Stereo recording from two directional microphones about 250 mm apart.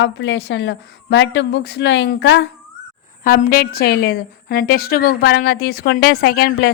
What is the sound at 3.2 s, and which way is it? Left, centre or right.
A woman's voice, left.